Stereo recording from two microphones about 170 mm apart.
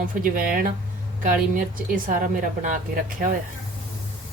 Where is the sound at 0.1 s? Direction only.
55° right (ahead or behind).